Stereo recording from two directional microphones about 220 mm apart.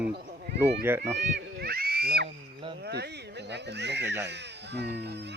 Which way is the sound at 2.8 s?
50° right (ahead or behind).